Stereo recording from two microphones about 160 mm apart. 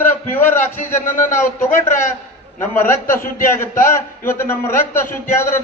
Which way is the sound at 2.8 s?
15° left (ahead or behind).